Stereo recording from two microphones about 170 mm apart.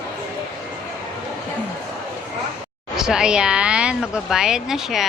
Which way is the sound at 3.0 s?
5° right (ahead or behind).